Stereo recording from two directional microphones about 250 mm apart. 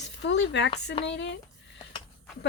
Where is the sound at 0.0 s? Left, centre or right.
Left.